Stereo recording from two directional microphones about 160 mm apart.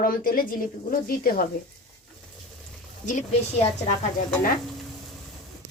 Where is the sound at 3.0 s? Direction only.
50° left (ahead or behind).